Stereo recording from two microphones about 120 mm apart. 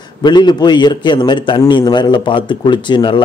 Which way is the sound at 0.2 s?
35° left (ahead or behind).